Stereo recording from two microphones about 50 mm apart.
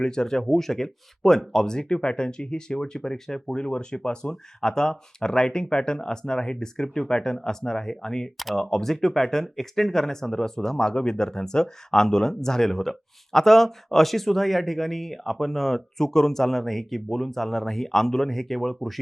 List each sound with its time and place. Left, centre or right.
0.0 s speech: centre
6.8 s speech: centre